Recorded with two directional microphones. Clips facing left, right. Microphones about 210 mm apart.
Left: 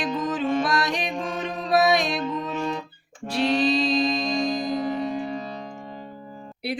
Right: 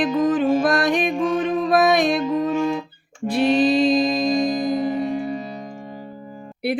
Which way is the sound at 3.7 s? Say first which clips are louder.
Right 6 dB; 50° right (ahead or behind).